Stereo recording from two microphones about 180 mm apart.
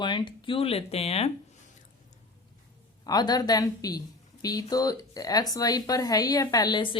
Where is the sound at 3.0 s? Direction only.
20° left (ahead or behind).